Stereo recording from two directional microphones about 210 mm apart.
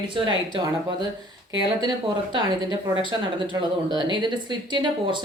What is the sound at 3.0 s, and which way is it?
A woman's voice, 20° right (ahead or behind).